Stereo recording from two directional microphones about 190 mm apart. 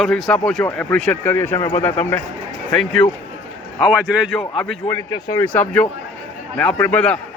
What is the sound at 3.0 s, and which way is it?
Speech, 25° left (ahead or behind).